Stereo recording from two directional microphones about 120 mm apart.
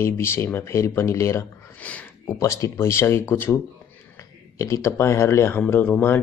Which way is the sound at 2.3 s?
25° left (ahead or behind).